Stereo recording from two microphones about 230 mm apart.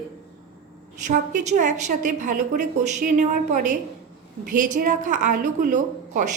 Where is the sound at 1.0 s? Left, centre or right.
Right.